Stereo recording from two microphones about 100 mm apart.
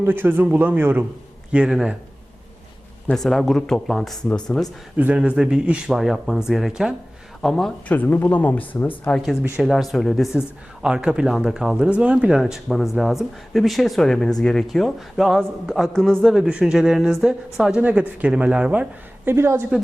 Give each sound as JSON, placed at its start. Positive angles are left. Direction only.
{"t": 0.0, "sound": "speech", "side_deg": -20}
{"t": 1.5, "sound": "speech", "side_deg": -10}
{"t": 3.1, "sound": "speech", "side_deg": 5}
{"t": 4.9, "sound": "speech", "side_deg": -15}
{"t": 7.9, "sound": "speech", "side_deg": 15}
{"t": 9.1, "sound": "speech", "side_deg": 0}
{"t": 10.8, "sound": "speech", "side_deg": -10}
{"t": 12.4, "sound": "speech", "side_deg": 0}